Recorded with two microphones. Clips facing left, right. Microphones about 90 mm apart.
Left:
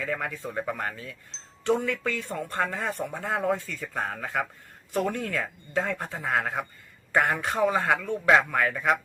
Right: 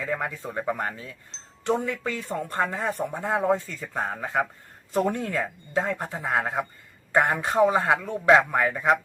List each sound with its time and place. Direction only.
0.0 s a man's voice: 20° right (ahead or behind)